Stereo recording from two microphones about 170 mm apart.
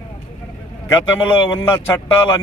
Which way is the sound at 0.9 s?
10° left (ahead or behind).